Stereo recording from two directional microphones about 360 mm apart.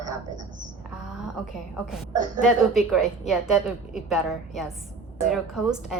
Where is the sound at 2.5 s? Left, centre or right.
Centre.